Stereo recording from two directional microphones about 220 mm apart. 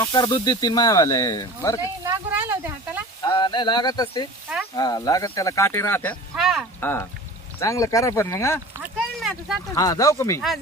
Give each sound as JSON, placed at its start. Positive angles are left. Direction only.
{"t": 0.0, "sound": "speech", "side_deg": 15}
{"t": 2.0, "sound": "a sound", "side_deg": -10}
{"t": 3.3, "sound": "speech", "side_deg": 20}
{"t": 6.7, "sound": "speech", "side_deg": 10}
{"t": 8.8, "sound": "a sound", "side_deg": 0}
{"t": 9.7, "sound": "speech", "side_deg": 15}